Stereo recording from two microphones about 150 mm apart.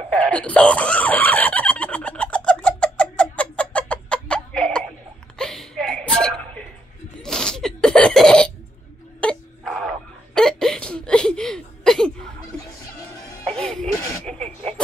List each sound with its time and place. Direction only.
0.2 s fowl: 10° left (ahead or behind)
5.4 s chuckle: 5° left (ahead or behind)
7.2 s cough: 5° left (ahead or behind)
9.2 s wail: 5° left (ahead or behind)
13.6 s music: 5° left (ahead or behind)
14.4 s a sound: 45° right (ahead or behind)